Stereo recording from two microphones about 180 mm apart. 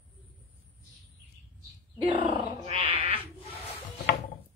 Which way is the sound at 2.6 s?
30° right (ahead or behind).